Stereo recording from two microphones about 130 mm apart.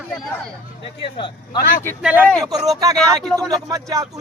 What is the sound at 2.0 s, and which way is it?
Speech, 15° right (ahead or behind).